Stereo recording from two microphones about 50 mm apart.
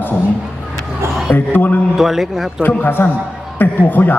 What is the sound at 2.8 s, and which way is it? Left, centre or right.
A woman's voice, left.